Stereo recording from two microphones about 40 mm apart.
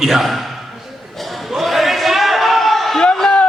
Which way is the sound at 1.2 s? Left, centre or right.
Centre.